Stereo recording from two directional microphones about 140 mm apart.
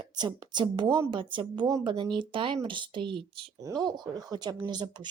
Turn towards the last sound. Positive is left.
turn(degrees=-30)  # may be behind; listen again after turning